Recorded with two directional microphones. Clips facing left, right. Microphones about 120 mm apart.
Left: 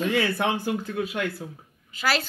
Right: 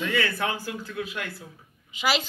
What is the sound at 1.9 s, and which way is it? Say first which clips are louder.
Speech: even; 15° right (ahead or behind).